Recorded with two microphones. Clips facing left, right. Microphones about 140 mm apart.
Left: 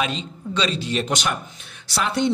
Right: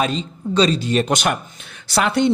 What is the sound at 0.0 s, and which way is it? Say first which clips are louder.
A man's voice: right 5 dB; 40° right (ahead or behind).